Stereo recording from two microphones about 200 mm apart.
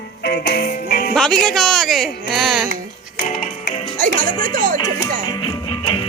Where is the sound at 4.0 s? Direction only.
40° right (ahead or behind).